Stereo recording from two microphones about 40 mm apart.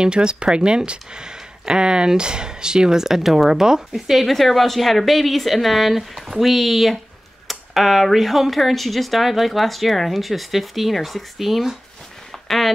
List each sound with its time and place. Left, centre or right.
0.0 s speech: right
3.9 s speech: centre
12.3 s a sound: centre